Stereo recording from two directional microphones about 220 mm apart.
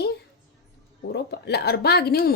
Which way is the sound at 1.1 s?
50° left (ahead or behind).